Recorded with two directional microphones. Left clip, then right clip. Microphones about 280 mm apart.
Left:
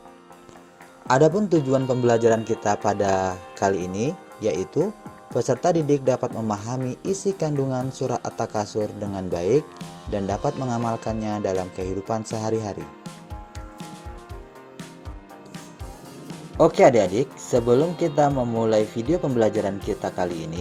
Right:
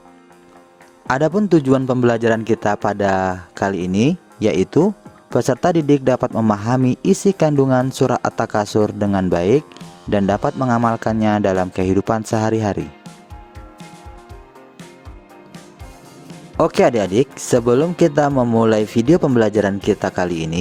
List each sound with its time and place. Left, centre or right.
1.0 s speech: right
9.6 s speech: centre
10.1 s speech: right
10.7 s speech: right
11.0 s speech: right
16.6 s speech: right